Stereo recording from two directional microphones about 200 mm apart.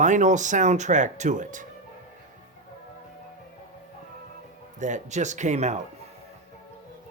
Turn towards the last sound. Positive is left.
turn(degrees=-35)  # may be behind; listen again after turning